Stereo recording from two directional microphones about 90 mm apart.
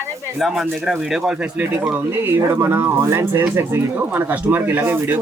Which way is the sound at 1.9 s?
25° right (ahead or behind).